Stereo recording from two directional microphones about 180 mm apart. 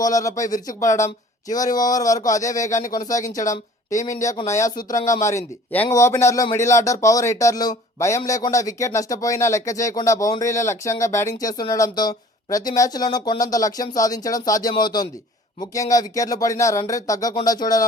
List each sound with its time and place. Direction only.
0.0 s speech: 20° left (ahead or behind)